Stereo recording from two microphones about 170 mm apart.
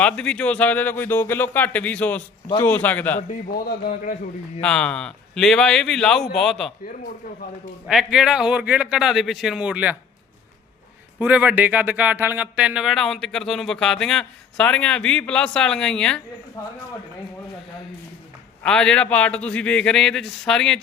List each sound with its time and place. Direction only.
0.0 s speech: 5° left (ahead or behind)
3.5 s a man's voice: 65° left (ahead or behind)
4.6 s speech: 5° left (ahead or behind)
7.9 s speech: centre (ahead or behind)
11.2 s speech: 10° right (ahead or behind)
18.6 s speech: 5° left (ahead or behind)